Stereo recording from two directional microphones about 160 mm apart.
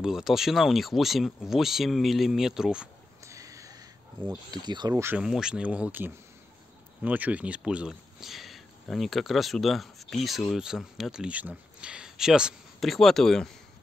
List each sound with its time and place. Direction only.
0.0 s speech: 5° right (ahead or behind)
3.3 s a sound: 20° right (ahead or behind)
4.5 s speech: 25° right (ahead or behind)
5.1 s speech: 5° right (ahead or behind)